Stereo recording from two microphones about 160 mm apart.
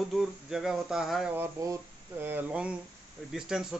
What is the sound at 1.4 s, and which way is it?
Speech, 20° right (ahead or behind).